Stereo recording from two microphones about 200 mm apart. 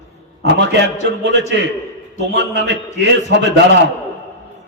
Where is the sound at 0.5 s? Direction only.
60° right (ahead or behind).